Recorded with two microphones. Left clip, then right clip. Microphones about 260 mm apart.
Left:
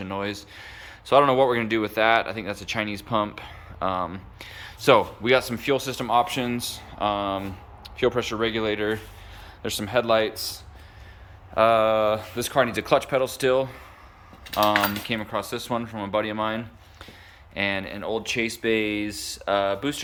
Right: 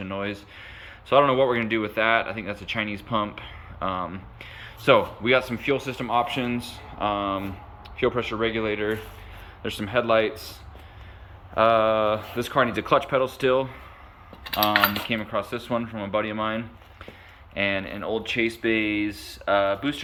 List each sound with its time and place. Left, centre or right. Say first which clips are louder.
0.0 s speech: left 1 dB; centre
0.7 s a sound: left 1 dB; centre
1.1 s speech: left 1 dB; centre
11.5 s speech: left 1 dB; centre
15.0 s speech: right 1 dB; centre